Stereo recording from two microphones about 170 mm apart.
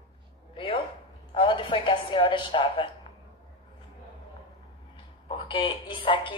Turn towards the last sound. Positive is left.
turn(degrees=30)  # may be behind; listen again after turning